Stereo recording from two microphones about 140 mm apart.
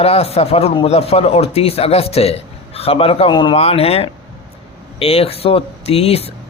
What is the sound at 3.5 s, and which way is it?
A man's voice, 45° left (ahead or behind).